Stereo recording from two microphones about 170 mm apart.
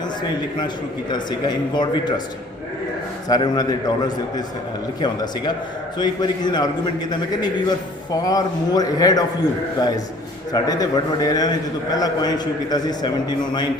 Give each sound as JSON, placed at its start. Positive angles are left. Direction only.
{"t": 1.1, "sound": "a man's voice", "side_deg": 25}
{"t": 3.2, "sound": "a man's voice", "side_deg": 25}
{"t": 4.9, "sound": "a man's voice", "side_deg": 25}
{"t": 8.1, "sound": "a man's voice", "side_deg": 20}